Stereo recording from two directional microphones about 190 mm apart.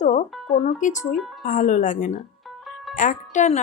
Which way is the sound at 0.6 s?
40° left (ahead or behind).